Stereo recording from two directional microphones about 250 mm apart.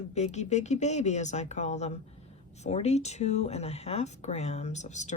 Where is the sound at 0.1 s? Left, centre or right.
Left.